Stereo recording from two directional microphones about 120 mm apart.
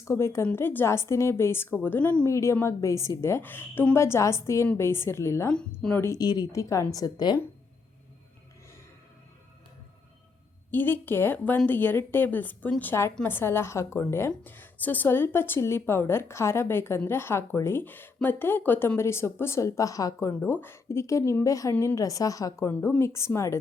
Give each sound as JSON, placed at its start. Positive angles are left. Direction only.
{"t": 0.0, "sound": "a woman's voice", "side_deg": 25}
{"t": 2.2, "sound": "a woman's voice", "side_deg": 25}
{"t": 5.8, "sound": "a woman's voice", "side_deg": 5}
{"t": 6.1, "sound": "a woman's voice", "side_deg": 35}
{"t": 10.7, "sound": "a woman's voice", "side_deg": 15}